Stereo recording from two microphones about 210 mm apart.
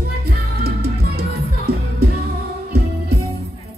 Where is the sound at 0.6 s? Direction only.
50° right (ahead or behind).